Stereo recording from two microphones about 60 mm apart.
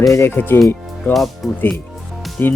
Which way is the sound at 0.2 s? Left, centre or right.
Left.